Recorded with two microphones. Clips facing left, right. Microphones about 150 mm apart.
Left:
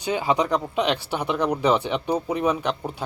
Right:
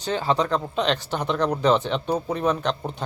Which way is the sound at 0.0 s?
10° left (ahead or behind).